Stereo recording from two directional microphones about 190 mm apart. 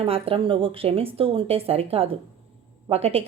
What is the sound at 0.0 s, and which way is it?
A woman's voice, 30° right (ahead or behind).